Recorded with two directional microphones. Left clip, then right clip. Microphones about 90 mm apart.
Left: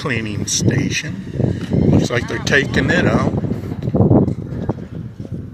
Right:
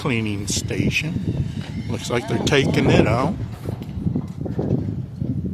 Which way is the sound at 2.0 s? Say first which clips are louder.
Left 2 dB; 55° right (ahead or behind).